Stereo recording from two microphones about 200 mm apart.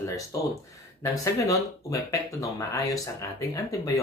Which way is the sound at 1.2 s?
15° left (ahead or behind).